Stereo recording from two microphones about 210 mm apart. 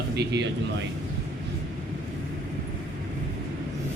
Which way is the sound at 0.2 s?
55° right (ahead or behind).